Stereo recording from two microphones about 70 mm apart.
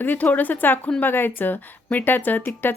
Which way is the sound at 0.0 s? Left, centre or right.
Left.